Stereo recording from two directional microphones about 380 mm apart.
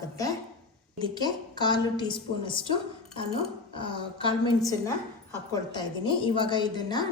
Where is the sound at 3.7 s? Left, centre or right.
Centre.